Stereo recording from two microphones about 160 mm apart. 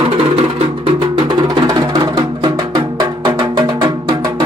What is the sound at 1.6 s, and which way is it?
Music, 25° right (ahead or behind).